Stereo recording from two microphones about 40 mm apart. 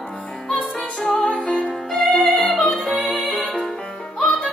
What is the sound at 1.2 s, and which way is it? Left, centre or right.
Music, left.